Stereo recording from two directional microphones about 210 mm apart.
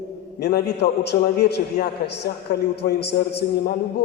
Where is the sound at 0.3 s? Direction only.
50° left (ahead or behind).